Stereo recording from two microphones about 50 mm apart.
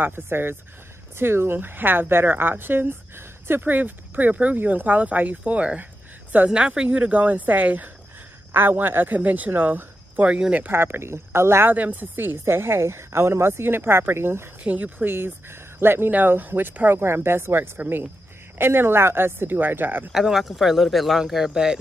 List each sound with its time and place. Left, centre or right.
0.0 s speech: right
10.7 s speech: right
11.6 s speech: right
14.6 s speech: right
15.1 s speech: right
16.1 s speech: right
17.0 s speech: right
20.1 s speech: centre